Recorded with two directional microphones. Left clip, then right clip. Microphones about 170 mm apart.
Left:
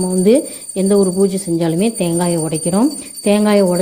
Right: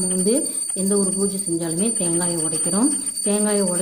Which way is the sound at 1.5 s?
45° left (ahead or behind).